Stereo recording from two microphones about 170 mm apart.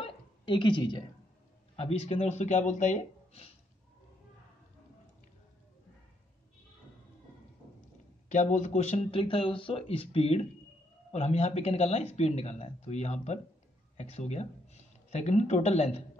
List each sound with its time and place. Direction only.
0.0 s a sound: 30° left (ahead or behind)
1.8 s speech: 35° left (ahead or behind)
8.3 s speech: 45° left (ahead or behind)